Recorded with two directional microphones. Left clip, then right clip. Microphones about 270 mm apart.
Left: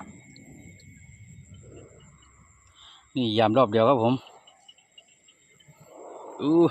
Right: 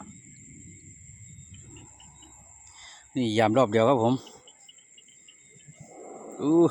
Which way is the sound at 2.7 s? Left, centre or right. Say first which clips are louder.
Left 1 dB; centre.